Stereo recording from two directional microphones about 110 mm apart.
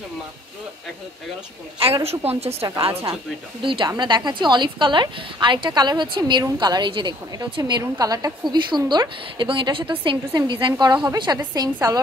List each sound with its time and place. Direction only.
2.0 s a woman's voice: 65° right (ahead or behind)
3.6 s a woman's voice: 50° right (ahead or behind)